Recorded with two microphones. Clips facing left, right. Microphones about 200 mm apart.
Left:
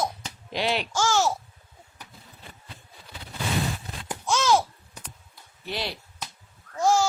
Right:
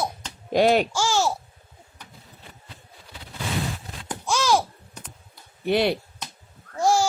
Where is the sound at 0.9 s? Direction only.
10° right (ahead or behind).